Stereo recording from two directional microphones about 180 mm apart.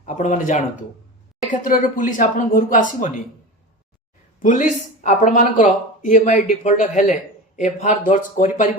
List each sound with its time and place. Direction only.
0.0 s speech: 45° left (ahead or behind)
4.4 s speech: 45° left (ahead or behind)